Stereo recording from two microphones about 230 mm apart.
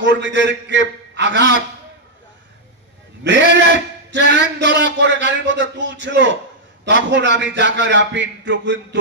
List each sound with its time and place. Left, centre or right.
0.0 s a man's voice: right
3.3 s a man's voice: right